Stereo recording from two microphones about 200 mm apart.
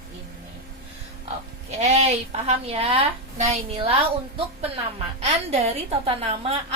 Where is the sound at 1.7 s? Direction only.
35° right (ahead or behind).